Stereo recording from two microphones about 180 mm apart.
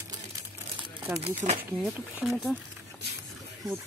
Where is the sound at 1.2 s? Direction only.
40° right (ahead or behind).